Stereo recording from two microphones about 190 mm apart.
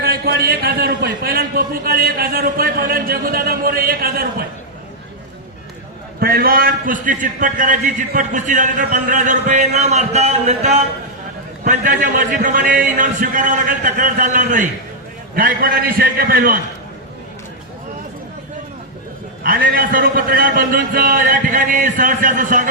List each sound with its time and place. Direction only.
0.0 s a man's voice: 55° right (ahead or behind)
6.1 s a man's voice: 50° right (ahead or behind)
19.4 s a man's voice: 50° right (ahead or behind)